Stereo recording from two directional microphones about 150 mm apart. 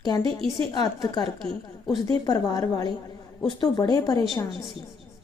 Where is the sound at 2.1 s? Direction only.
25° left (ahead or behind).